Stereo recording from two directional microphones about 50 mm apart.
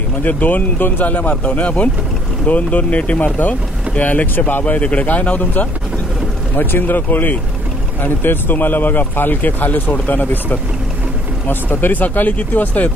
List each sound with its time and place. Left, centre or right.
0.2 s speech: left
3.3 s speech: left
12.0 s speech: left